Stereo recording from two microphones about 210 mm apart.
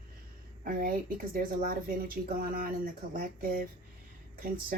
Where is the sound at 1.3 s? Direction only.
45° right (ahead or behind).